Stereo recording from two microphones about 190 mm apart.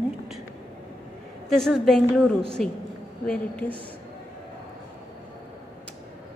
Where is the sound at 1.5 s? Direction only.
Centre (ahead or behind).